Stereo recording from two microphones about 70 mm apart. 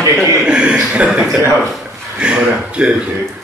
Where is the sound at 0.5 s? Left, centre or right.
Centre.